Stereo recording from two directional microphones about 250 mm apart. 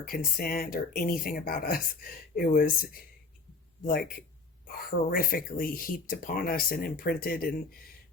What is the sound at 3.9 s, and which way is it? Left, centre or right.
Speech, left.